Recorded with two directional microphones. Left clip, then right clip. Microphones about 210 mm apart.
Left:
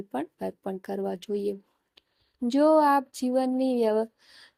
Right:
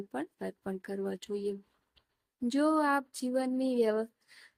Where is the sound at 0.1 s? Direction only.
20° left (ahead or behind).